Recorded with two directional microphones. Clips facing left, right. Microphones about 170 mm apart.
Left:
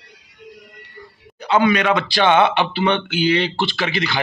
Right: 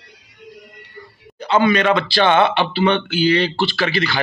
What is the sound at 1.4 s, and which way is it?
Speech, 15° left (ahead or behind).